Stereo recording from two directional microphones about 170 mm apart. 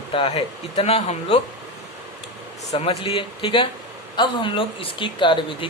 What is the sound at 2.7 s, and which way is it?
Speech, 35° left (ahead or behind).